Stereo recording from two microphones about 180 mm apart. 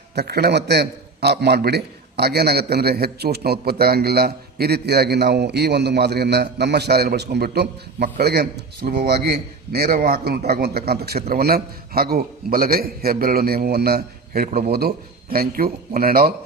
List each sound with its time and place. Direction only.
0.2 s a man's voice: 60° right (ahead or behind)